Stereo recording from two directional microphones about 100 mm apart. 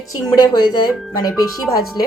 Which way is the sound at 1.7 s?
65° left (ahead or behind).